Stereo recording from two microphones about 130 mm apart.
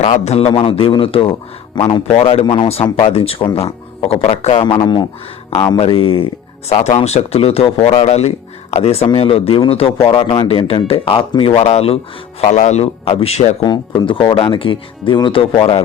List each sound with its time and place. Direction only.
0.0 s a man's voice: 50° left (ahead or behind); by 5.0 s 35° left (ahead or behind)
5.7 s a man's voice: 50° left (ahead or behind)
13.6 s speech: 35° left (ahead or behind)